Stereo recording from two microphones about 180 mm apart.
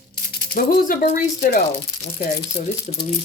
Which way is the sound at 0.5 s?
50° left (ahead or behind).